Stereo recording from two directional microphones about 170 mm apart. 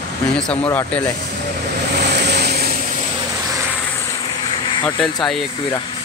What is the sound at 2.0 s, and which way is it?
Vehicle, 80° right.